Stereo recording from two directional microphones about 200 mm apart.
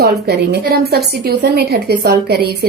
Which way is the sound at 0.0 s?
55° right (ahead or behind).